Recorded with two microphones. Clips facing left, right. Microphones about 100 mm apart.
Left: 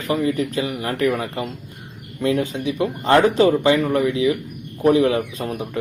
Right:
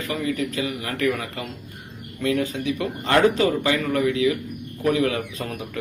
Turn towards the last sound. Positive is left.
turn(degrees=25)  # may be behind; listen again after turning